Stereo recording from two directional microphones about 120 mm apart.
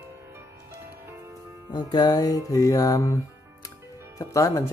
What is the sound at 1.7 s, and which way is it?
Music, 40° left (ahead or behind).